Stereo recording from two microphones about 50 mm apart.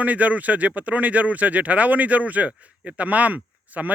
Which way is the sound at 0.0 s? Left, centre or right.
Right.